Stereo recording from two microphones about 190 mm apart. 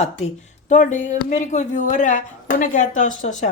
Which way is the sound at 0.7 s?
40° left (ahead or behind).